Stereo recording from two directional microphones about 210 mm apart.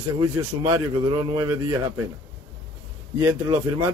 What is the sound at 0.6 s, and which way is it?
Speech, 20° right (ahead or behind).